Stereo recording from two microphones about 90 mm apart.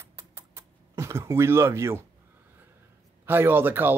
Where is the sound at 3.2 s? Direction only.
25° right (ahead or behind).